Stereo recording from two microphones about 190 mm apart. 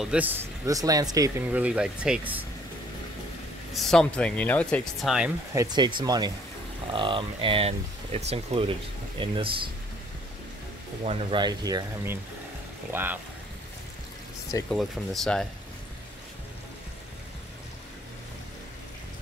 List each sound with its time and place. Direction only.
0.0 s speech: 5° right (ahead or behind)
1.5 s speech: 5° right (ahead or behind)
3.7 s speech: centre (ahead or behind)
5.5 s speech: 20° right (ahead or behind)
11.1 s speech: 25° right (ahead or behind)
14.7 s speech: centre (ahead or behind)